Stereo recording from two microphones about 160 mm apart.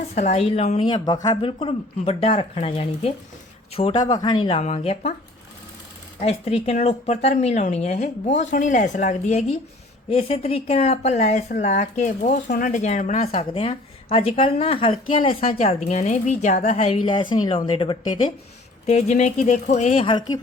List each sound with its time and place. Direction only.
0.1 s speech: 50° left (ahead or behind)
0.9 s speech: 30° left (ahead or behind)
6.2 s speech: 40° left (ahead or behind)
18.9 s speech: 45° left (ahead or behind)
20.1 s speech: 25° left (ahead or behind)